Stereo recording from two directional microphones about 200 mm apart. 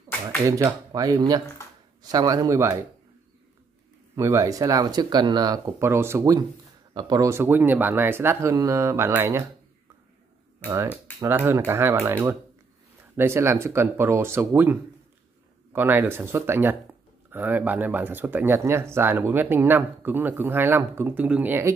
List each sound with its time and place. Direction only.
0.5 s speech: 15° right (ahead or behind)
4.1 s speech: 15° right (ahead or behind)
10.6 s speech: 15° right (ahead or behind)